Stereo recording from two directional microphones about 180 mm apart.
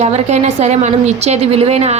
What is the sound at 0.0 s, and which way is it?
A woman's voice, 40° right (ahead or behind).